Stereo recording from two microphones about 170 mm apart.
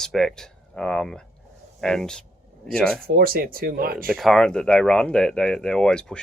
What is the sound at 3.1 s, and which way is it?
Speech, 60° right (ahead or behind).